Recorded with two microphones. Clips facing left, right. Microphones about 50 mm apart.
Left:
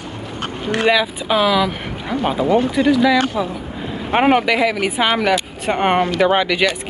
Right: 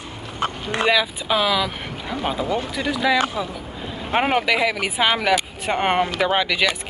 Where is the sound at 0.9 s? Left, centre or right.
Centre.